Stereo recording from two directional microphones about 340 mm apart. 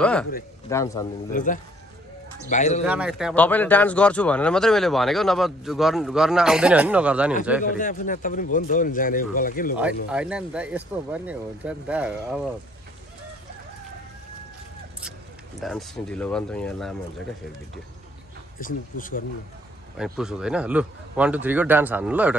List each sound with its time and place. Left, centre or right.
0.0 s a man's voice: centre
1.3 s a man's voice: left
2.8 s speech: centre
7.6 s a man's voice: left
10.1 s speech: centre
15.6 s speech: centre
18.6 s a man's voice: left
20.0 s speech: centre